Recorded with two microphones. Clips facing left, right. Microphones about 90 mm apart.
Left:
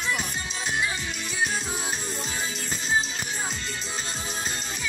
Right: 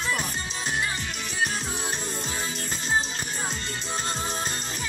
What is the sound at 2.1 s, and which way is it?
Music, 50° right (ahead or behind).